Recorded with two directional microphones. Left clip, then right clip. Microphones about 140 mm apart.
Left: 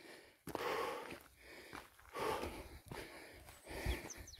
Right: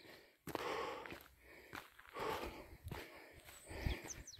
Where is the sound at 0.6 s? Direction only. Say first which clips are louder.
Left 4 dB; 45° left (ahead or behind).